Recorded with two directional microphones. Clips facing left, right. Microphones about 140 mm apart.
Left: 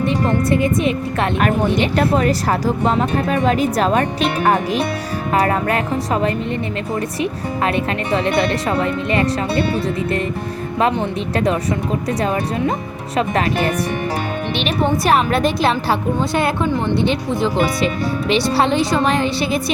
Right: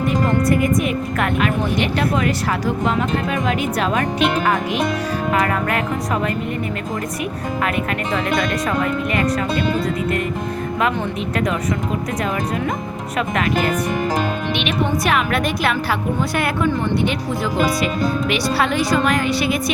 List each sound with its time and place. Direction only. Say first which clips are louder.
0.4 s speech: left 1 dB; 25° left (ahead or behind)
2.0 s a woman's voice: left 3 dB; 35° left (ahead or behind)
8.1 s a woman's voice: left 4 dB; 30° left (ahead or behind)
13.1 s a woman's voice: left 2 dB; 30° left (ahead or behind)